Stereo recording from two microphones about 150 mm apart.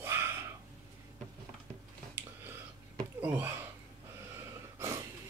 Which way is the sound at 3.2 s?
10° right (ahead or behind).